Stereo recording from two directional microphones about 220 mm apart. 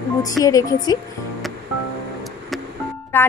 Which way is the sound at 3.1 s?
10° left (ahead or behind).